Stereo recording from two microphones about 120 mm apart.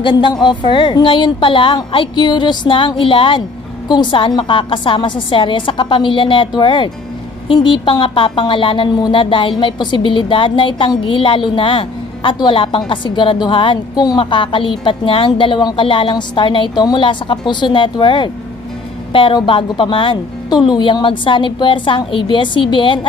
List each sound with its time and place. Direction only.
0.0 s a woman's voice: 40° left (ahead or behind)